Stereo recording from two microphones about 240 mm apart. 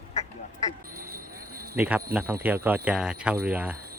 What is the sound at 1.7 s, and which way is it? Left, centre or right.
Speech, centre.